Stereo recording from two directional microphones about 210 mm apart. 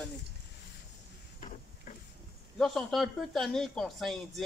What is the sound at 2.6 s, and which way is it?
Speech, centre (ahead or behind).